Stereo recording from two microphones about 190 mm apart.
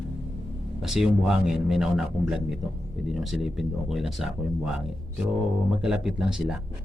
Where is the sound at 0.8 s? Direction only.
Centre (ahead or behind).